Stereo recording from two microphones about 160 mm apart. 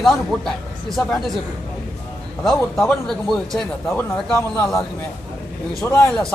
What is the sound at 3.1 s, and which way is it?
A man's voice, 5° left (ahead or behind).